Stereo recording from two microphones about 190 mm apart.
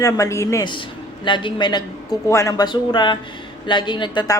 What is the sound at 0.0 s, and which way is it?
A woman's voice, 15° left (ahead or behind).